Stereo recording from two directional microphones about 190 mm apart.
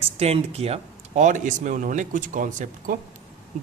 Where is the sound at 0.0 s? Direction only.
30° right (ahead or behind).